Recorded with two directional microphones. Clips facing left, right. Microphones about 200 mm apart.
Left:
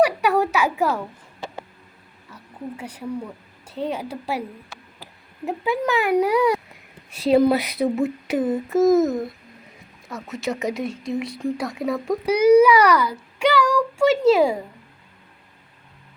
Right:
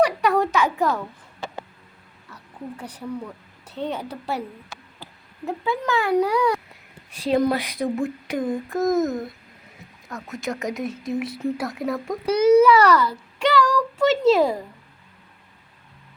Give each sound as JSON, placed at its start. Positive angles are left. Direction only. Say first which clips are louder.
{"t": 0.0, "sound": "a sound", "louder": "left 1 dB", "side_deg": 10}
{"t": 2.3, "sound": "speech", "louder": "left 2 dB", "side_deg": 10}
{"t": 5.5, "sound": "speech", "louder": "left 2 dB", "side_deg": 15}
{"t": 12.3, "sound": "child singing", "louder": "left 1 dB", "side_deg": 10}